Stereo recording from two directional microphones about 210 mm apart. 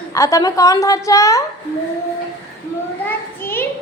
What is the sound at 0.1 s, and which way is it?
A woman's voice, 15° left (ahead or behind).